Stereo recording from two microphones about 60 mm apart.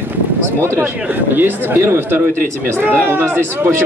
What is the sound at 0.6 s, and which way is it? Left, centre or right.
A man's voice, right.